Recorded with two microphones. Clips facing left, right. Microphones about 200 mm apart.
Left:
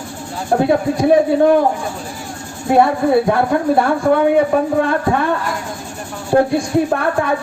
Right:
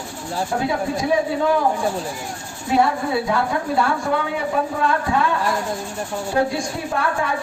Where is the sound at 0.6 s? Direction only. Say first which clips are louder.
Left 9 dB; 60° left (ahead or behind).